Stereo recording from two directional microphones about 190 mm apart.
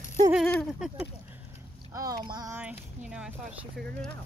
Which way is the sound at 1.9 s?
20° right (ahead or behind).